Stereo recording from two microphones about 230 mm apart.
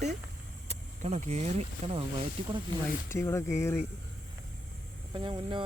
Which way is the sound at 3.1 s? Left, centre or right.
Centre.